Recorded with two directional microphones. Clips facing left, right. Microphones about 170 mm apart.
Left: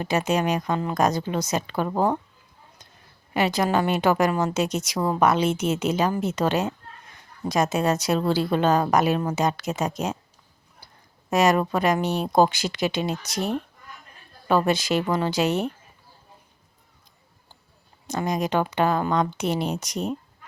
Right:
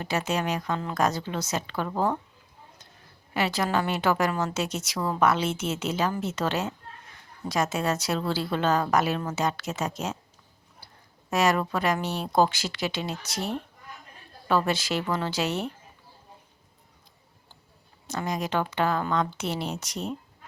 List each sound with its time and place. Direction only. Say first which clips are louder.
0.0 s a woman's voice: left 5 dB; 15° left (ahead or behind)
3.3 s a woman's voice: left 4 dB; 15° left (ahead or behind)
11.3 s a woman's voice: left 4 dB; 20° left (ahead or behind)
18.1 s a woman's voice: left 4 dB; 15° left (ahead or behind)